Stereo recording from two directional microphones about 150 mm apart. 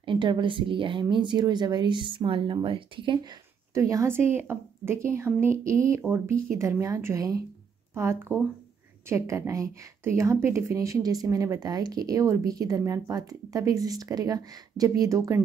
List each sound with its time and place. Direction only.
0.0 s speech: 35° right (ahead or behind)
3.7 s a woman's voice: 20° right (ahead or behind)